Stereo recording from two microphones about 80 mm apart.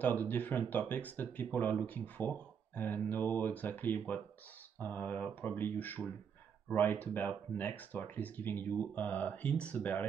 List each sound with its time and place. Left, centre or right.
0.0 s speech: left